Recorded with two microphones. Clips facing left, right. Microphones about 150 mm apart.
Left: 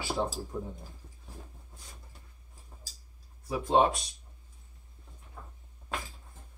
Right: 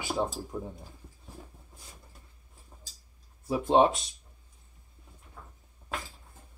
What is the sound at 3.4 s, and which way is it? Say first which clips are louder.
Speech: right 3 dB; 25° right (ahead or behind).